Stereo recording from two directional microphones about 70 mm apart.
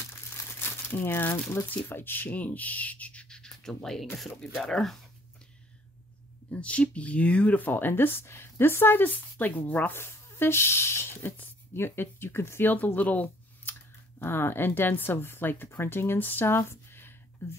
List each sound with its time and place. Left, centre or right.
0.6 s speech: left; by 4.9 s centre
6.5 s speech: centre
9.9 s speech: left
12.7 s speech: left